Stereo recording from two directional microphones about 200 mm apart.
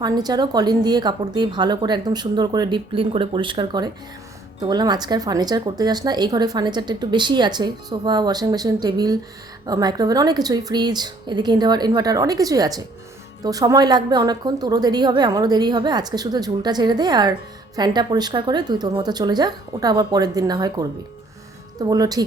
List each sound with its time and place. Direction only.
0.0 s speech: 20° right (ahead or behind)